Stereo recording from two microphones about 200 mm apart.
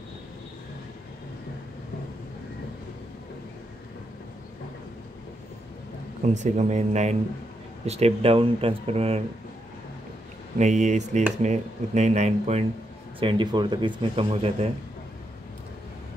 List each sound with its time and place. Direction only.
6.2 s speech: 35° right (ahead or behind)
10.6 s speech: 35° right (ahead or behind)